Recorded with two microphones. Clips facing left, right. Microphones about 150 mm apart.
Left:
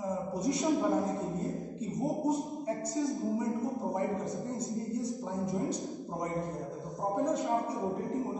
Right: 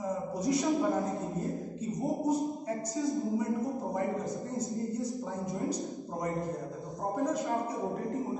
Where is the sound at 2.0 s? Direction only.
Centre (ahead or behind).